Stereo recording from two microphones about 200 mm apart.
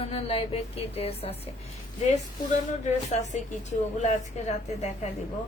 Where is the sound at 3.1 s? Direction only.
35° left (ahead or behind).